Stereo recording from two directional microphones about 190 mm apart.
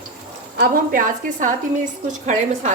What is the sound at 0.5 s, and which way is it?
A woman's voice, 45° right (ahead or behind).